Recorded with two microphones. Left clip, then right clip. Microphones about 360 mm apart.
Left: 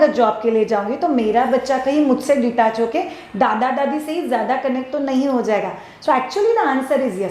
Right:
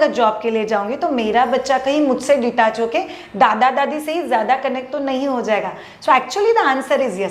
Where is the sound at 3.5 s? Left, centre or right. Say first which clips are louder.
Right 3 dB; right.